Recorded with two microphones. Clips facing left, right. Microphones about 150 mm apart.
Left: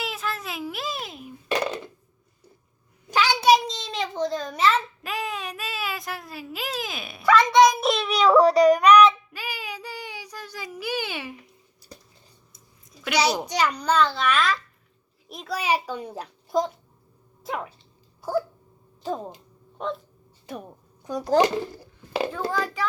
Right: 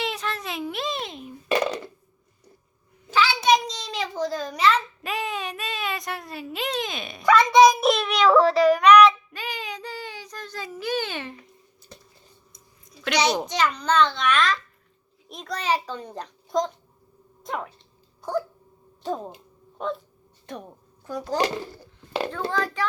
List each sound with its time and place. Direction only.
0.0 s a sound: 5° left (ahead or behind)
3.1 s a sound: 15° left (ahead or behind)
8.5 s child singing: 40° left (ahead or behind)
8.8 s child singing: 10° left (ahead or behind)
12.5 s babbling: 5° left (ahead or behind)
15.3 s a child's voice: 5° left (ahead or behind)
17.4 s dog: 5° left (ahead or behind)
19.0 s speech: centre (ahead or behind)
21.1 s a child's voice: 20° left (ahead or behind)
22.2 s a child's voice: 5° left (ahead or behind)